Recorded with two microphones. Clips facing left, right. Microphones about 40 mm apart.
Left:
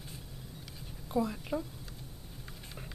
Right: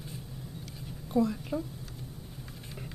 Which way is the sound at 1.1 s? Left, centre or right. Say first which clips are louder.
Right 4 dB; centre.